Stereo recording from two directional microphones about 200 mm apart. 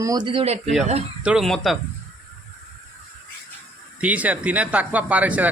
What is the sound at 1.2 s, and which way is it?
Speech, 5° right (ahead or behind).